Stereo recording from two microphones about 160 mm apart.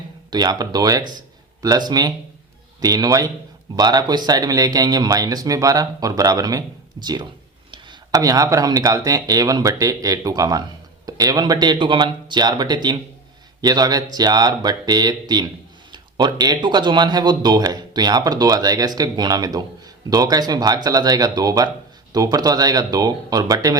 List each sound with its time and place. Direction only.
0.3 s speech: 25° right (ahead or behind)